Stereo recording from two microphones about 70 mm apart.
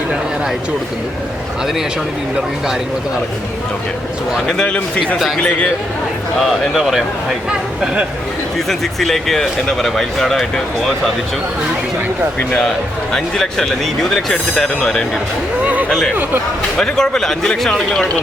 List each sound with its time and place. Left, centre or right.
4.6 s speech: centre
6.4 s speech: centre
8.5 s speech: centre
12.5 s speech: centre
15.6 s a sound: right
16.7 s speech: centre